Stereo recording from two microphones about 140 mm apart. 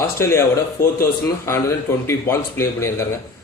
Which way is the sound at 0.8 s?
90° left.